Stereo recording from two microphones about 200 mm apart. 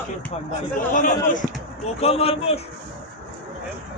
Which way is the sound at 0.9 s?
40° left (ahead or behind).